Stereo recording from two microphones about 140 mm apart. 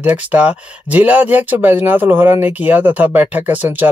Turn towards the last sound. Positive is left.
turn(degrees=-10)  # may be behind; listen again after turning